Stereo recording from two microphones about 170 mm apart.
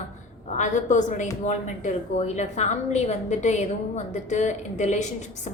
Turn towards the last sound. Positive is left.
turn(degrees=45)  # may be behind; listen again after turning